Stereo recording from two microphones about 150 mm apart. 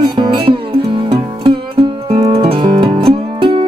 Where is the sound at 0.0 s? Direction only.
35° right (ahead or behind).